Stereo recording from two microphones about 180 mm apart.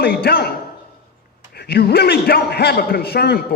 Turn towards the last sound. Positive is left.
turn(degrees=60)  # may be behind; listen again after turning